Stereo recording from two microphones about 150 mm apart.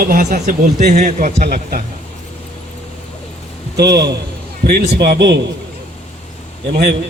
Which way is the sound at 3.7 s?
90° right.